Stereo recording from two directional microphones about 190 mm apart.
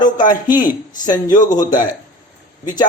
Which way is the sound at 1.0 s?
20° left (ahead or behind).